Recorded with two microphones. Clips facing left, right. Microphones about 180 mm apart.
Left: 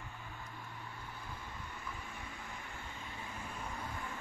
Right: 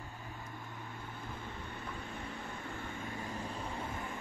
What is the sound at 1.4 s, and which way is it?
Vehicle, 60° right (ahead or behind).